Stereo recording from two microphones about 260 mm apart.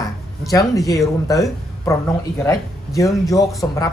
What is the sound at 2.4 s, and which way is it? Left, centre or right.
A man's voice, centre.